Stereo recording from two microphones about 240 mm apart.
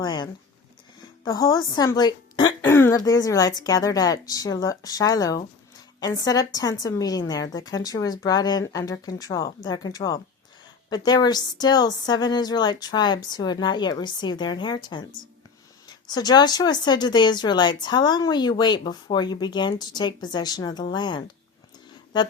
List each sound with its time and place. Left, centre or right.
0.0 s speech: centre